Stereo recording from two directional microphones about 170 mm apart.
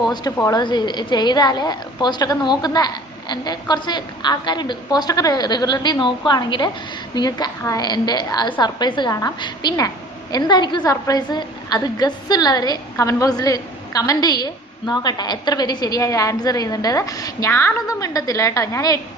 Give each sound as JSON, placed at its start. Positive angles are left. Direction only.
{"t": 0.0, "sound": "a woman's voice", "side_deg": 20}